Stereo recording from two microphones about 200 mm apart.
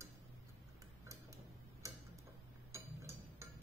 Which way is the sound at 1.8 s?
15° right (ahead or behind).